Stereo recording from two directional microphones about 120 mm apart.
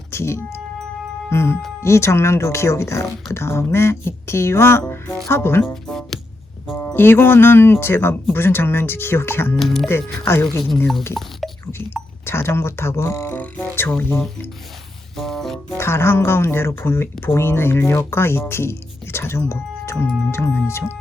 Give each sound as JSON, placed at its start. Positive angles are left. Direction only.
{"t": 0.1, "sound": "music", "side_deg": 20}
{"t": 1.3, "sound": "speech", "side_deg": 20}
{"t": 5.6, "sound": "music", "side_deg": 5}
{"t": 6.7, "sound": "speech", "side_deg": 15}
{"t": 9.6, "sound": "speech", "side_deg": 0}
{"t": 11.1, "sound": "a sound", "side_deg": 0}
{"t": 12.2, "sound": "speech", "side_deg": 20}
{"t": 15.1, "sound": "music", "side_deg": 0}
{"t": 15.8, "sound": "speech", "side_deg": 20}